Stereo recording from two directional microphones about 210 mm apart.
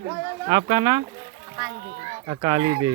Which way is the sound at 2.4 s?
25° right (ahead or behind).